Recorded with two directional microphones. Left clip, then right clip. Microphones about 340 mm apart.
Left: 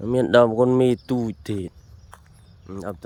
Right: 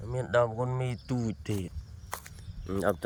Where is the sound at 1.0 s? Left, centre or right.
Centre.